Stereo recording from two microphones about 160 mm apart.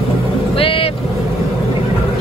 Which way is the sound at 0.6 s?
35° left (ahead or behind).